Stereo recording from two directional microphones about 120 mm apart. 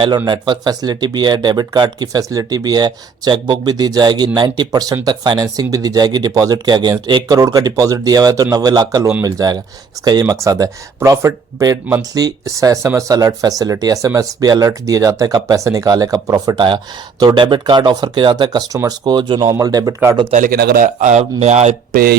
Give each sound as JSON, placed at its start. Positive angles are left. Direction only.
{"t": 0.3, "sound": "speech", "side_deg": -35}
{"t": 19.5, "sound": "speech", "side_deg": -30}
{"t": 20.3, "sound": "a man's voice", "side_deg": -90}